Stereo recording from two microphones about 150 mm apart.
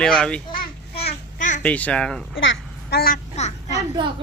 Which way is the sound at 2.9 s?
80° left.